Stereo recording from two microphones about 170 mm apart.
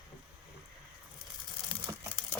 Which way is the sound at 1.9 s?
15° right (ahead or behind).